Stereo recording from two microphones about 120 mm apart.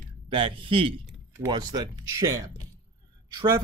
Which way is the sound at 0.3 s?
45° right (ahead or behind).